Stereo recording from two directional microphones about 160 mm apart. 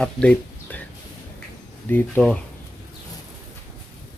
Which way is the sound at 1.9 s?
10° left (ahead or behind).